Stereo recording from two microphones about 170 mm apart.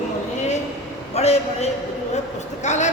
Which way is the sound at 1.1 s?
40° left (ahead or behind).